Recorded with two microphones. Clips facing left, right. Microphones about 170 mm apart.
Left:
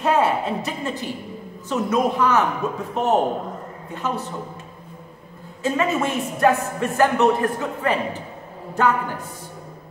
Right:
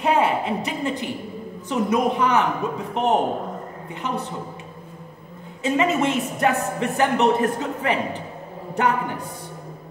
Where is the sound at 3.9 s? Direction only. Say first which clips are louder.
Left 1 dB; 15° right (ahead or behind).